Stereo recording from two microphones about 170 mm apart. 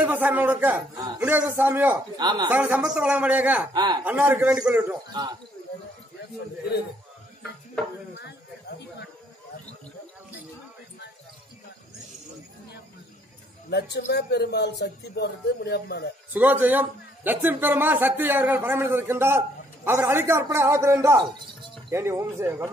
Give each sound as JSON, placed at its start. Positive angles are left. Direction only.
{"t": 0.0, "sound": "a man's voice", "side_deg": -10}
{"t": 2.1, "sound": "a woman's voice", "side_deg": -25}
{"t": 2.5, "sound": "a man's voice", "side_deg": -10}
{"t": 3.7, "sound": "a woman's voice", "side_deg": -25}
{"t": 4.0, "sound": "a man's voice", "side_deg": -10}
{"t": 8.2, "sound": "a sound", "side_deg": 80}
{"t": 13.7, "sound": "speech", "side_deg": 75}
{"t": 16.3, "sound": "a man's voice", "side_deg": -10}